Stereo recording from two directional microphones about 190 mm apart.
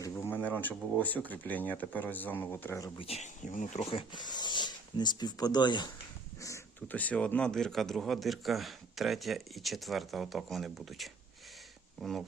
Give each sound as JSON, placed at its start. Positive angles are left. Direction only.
{"t": 0.0, "sound": "a sound", "side_deg": 15}
{"t": 0.4, "sound": "speech", "side_deg": 10}
{"t": 3.0, "sound": "speech", "side_deg": 35}